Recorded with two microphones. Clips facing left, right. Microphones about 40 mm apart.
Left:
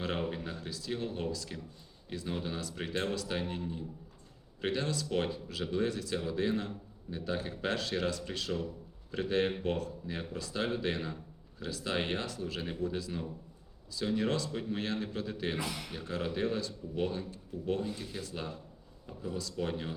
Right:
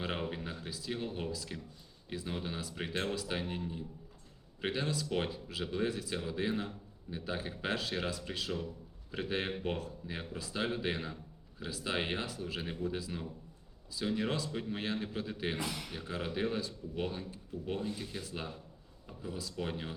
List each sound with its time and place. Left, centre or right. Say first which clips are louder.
0.0 s speech: left 2 dB; centre
15.6 s speech: left 1 dB; centre